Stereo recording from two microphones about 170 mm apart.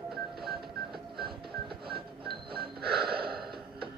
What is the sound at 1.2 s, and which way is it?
Music, 30° right (ahead or behind).